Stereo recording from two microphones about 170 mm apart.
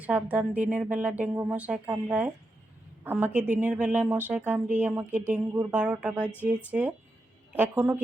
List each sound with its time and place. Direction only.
0.0 s a woman's voice: 10° right (ahead or behind)